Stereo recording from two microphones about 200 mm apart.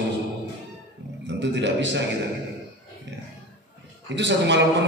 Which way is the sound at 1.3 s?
60° right (ahead or behind).